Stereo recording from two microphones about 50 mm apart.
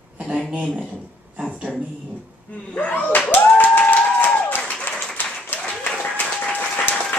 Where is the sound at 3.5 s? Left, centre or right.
Left.